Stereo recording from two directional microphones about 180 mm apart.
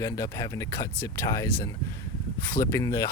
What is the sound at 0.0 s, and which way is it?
Speech, 15° left (ahead or behind).